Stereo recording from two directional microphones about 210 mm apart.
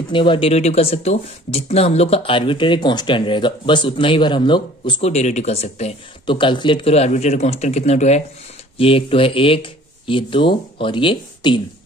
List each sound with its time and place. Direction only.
0.1 s speech: 25° left (ahead or behind)